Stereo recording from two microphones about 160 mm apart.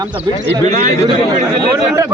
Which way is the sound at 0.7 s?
50° right (ahead or behind).